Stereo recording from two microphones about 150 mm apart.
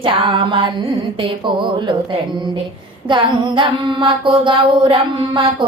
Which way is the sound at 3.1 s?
30° right (ahead or behind).